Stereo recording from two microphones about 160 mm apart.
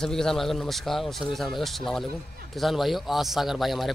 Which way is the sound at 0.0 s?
5° left (ahead or behind).